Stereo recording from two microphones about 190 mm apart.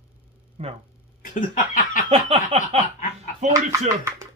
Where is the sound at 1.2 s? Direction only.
45° left (ahead or behind).